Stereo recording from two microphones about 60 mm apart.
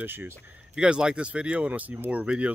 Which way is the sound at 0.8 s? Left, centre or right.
Centre.